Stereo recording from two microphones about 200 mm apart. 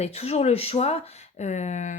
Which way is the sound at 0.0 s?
30° left (ahead or behind).